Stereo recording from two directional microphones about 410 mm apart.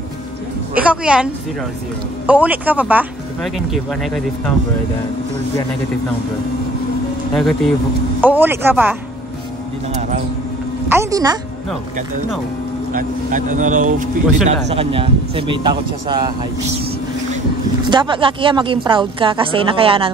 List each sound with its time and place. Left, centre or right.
0.7 s speech: centre
7.3 s speech: centre
10.9 s a woman's voice: centre
12.9 s a woman's voice: centre
17.8 s a woman's voice: centre